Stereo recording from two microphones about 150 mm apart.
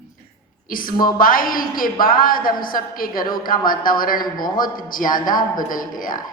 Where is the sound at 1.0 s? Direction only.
70° left (ahead or behind).